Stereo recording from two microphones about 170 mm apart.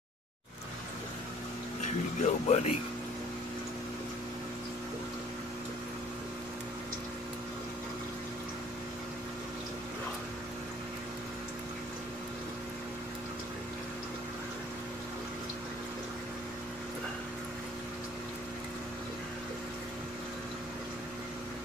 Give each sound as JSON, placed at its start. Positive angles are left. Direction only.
{"t": 2.2, "sound": "speech", "side_deg": 40}